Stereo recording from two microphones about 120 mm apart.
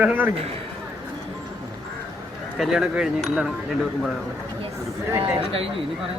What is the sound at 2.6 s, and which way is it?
Speech, 5° right (ahead or behind).